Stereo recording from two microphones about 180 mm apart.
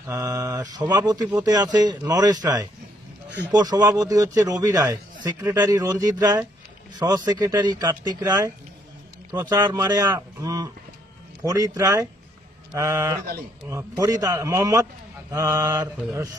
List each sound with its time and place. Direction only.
0.3 s a man's voice: 20° right (ahead or behind)